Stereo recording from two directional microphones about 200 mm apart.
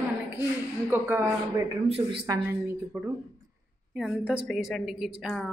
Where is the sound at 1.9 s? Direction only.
30° right (ahead or behind).